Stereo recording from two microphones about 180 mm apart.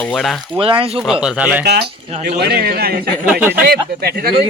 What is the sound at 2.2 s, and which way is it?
Speech, 60° right (ahead or behind).